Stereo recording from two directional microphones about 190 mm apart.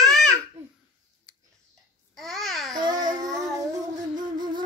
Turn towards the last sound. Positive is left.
turn(degrees=-25)  # may be behind; listen again after turning